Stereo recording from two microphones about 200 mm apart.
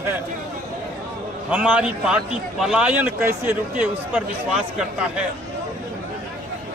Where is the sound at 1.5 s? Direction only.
5° right (ahead or behind).